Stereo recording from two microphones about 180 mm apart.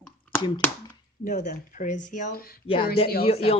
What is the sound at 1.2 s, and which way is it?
Speech, 45° left (ahead or behind).